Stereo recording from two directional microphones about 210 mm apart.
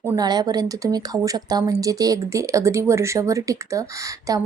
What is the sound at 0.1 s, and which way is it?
A woman's voice, 20° right (ahead or behind).